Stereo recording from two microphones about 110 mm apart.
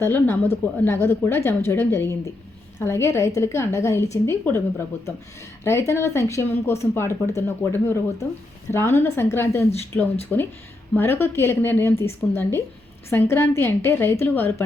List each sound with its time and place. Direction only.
0.0 s speech: 20° left (ahead or behind)
5.6 s speech: 25° left (ahead or behind)